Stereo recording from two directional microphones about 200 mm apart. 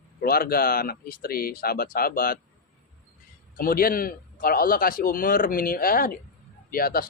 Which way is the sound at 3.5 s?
45° left (ahead or behind).